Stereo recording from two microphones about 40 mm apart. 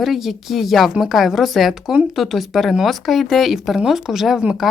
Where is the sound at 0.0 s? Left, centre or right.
Centre.